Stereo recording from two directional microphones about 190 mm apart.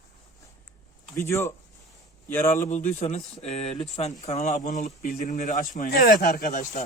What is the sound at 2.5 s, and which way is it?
Speech, 40° left (ahead or behind).